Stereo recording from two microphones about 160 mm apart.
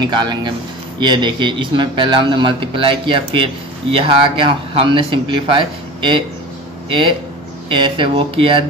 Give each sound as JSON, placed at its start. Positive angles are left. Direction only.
{"t": 0.0, "sound": "a man's voice", "side_deg": -25}